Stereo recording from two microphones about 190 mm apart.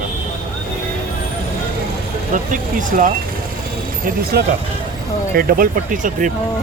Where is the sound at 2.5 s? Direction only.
45° right (ahead or behind).